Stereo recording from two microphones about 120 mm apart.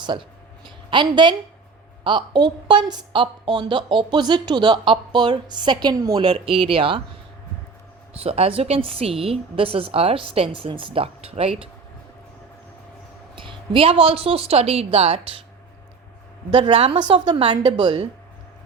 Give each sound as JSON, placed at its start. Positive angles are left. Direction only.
{"t": 0.0, "sound": "a sound", "side_deg": -40}
{"t": 2.0, "sound": "a woman's voice", "side_deg": -40}
{"t": 8.2, "sound": "a woman's voice", "side_deg": -55}
{"t": 13.3, "sound": "a woman's voice", "side_deg": -45}
{"t": 16.5, "sound": "a woman's voice", "side_deg": -40}